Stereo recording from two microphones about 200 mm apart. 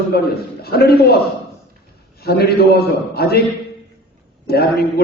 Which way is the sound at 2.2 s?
50° left (ahead or behind).